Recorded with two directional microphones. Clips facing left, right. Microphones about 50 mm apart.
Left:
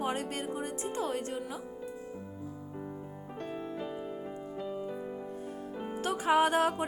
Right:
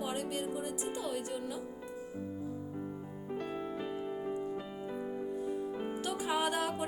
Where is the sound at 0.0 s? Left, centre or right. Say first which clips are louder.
Left 2 dB; left.